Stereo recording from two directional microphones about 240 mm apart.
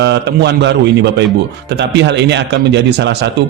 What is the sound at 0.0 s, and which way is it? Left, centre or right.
Speech, right.